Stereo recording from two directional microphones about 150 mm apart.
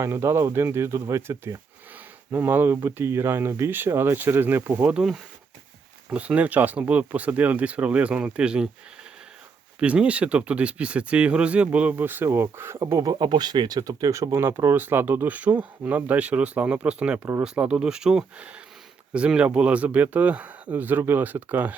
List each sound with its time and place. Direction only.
0.0 s speech: 15° right (ahead or behind)
9.8 s speech: 10° right (ahead or behind)